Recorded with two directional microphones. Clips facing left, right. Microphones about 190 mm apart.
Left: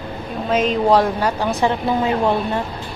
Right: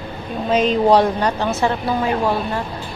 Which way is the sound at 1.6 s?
20° left (ahead or behind).